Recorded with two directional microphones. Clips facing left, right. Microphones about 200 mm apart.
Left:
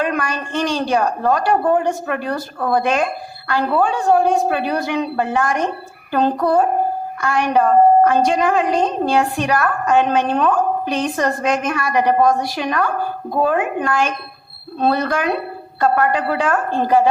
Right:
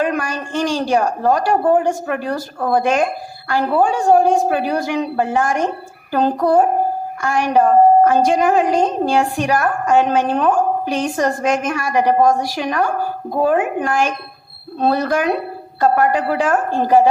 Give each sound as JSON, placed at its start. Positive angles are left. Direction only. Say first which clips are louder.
{"t": 0.0, "sound": "a woman's voice", "louder": "right 1 dB", "side_deg": -20}